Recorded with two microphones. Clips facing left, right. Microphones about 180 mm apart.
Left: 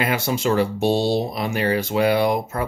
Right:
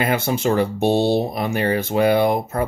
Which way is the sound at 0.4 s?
50° right (ahead or behind).